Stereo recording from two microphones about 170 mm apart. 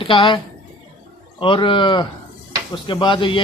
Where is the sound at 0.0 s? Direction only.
30° left (ahead or behind).